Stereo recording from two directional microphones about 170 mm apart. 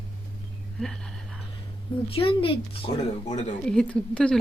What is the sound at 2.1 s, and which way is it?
Speech, 35° left (ahead or behind).